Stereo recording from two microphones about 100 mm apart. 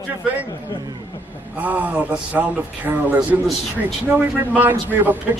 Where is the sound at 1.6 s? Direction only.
15° right (ahead or behind).